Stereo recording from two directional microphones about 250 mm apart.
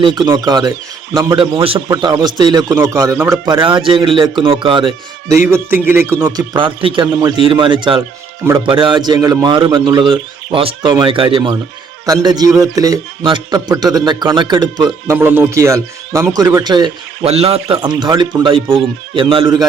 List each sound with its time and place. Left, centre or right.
0.0 s a man's voice: centre
1.4 s a man's voice: right